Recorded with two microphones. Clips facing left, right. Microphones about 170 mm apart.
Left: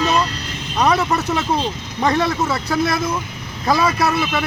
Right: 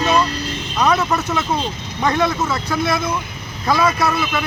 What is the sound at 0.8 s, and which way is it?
Speech, 35° left (ahead or behind).